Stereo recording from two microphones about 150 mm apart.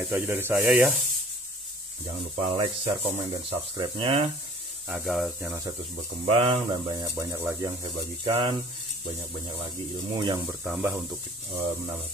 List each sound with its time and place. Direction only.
0.0 s rub: 15° right (ahead or behind)
0.7 s speech: 5° right (ahead or behind)
2.5 s speech: 35° right (ahead or behind)
4.8 s speech: 5° right (ahead or behind)
6.2 s speech: 40° right (ahead or behind); by 7.7 s 20° right (ahead or behind)
7.8 s speech: 35° right (ahead or behind)
10.1 s speech: 30° right (ahead or behind)
10.4 s rub: 10° right (ahead or behind)